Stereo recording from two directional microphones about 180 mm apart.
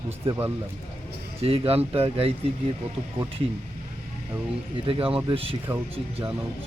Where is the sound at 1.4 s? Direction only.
30° right (ahead or behind).